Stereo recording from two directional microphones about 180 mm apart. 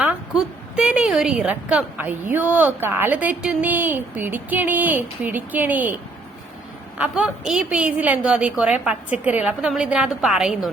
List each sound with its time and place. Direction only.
0.0 s a woman's voice: 5° right (ahead or behind)
7.0 s a woman's voice: 5° right (ahead or behind)